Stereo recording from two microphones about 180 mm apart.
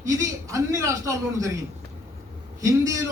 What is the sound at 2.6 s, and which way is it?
Speech, 20° right (ahead or behind).